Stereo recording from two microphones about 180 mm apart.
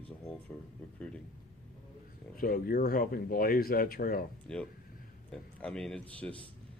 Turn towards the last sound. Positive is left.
turn(degrees=5)  # may be behind; listen again after turning